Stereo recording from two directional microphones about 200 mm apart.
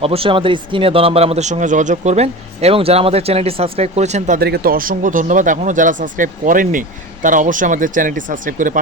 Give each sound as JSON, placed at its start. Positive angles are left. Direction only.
{"t": 0.0, "sound": "speech", "side_deg": -30}
{"t": 4.4, "sound": "speech", "side_deg": -50}